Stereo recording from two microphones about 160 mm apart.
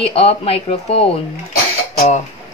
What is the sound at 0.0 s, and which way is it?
Speech, 40° left (ahead or behind).